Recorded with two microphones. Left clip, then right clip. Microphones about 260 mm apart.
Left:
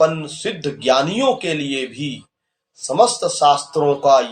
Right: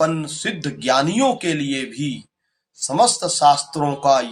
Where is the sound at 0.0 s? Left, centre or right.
Right.